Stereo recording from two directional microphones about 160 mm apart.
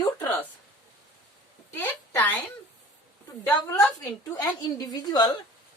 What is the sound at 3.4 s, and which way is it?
Speech, 10° left (ahead or behind).